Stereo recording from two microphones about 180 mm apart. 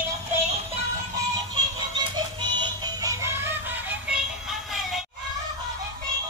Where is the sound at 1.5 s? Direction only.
25° right (ahead or behind); by 5.0 s centre (ahead or behind).